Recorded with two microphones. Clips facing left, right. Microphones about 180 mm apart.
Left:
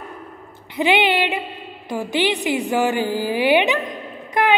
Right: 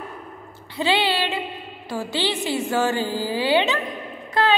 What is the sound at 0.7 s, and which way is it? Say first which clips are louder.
A woman's voice: left 4 dB; 20° left (ahead or behind).